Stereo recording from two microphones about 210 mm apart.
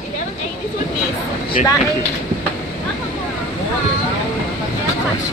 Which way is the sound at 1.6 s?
35° left (ahead or behind).